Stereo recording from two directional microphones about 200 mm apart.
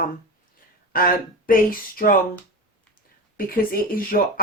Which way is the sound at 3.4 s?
45° left (ahead or behind).